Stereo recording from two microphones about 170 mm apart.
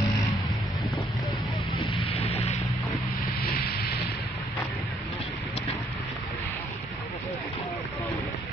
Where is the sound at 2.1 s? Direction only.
35° left (ahead or behind).